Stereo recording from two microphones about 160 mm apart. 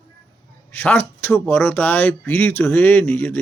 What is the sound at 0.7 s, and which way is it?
A man's voice, 10° left (ahead or behind).